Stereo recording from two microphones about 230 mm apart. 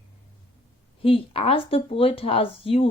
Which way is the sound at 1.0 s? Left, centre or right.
Left.